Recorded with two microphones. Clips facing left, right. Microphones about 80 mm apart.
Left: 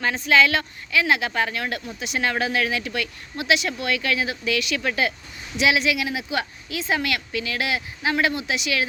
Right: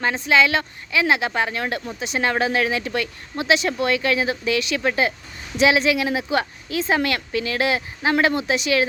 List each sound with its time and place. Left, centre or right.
0.0 s speech: right